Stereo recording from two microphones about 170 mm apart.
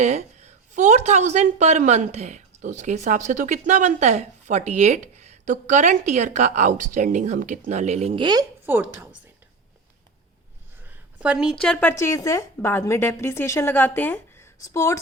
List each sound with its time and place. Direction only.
0.0 s a woman's voice: 40° right (ahead or behind); by 8.4 s 25° right (ahead or behind)
8.6 s a woman's voice: 10° right (ahead or behind)
10.8 s a woman's voice: 5° right (ahead or behind); by 14.9 s 15° left (ahead or behind)